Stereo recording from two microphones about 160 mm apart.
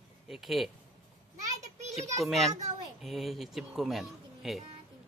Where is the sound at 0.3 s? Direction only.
Centre (ahead or behind).